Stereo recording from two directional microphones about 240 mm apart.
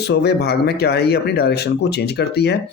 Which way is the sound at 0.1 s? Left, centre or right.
Left.